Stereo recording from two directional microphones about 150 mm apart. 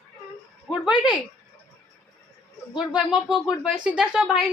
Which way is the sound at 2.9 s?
5° right (ahead or behind).